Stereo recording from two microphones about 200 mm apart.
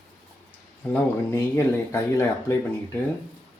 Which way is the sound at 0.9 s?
10° left (ahead or behind).